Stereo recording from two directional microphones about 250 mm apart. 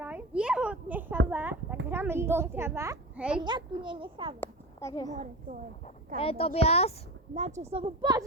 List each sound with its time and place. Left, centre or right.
0.0 s a sound: centre
1.9 s a child's voice: centre
3.4 s a child's voice: centre
4.4 s a child's voice: centre
5.1 s a woman's voice: right
6.1 s speech: left
7.3 s a child's voice: right